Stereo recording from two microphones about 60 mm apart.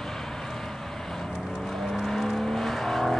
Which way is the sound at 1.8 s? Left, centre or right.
Centre.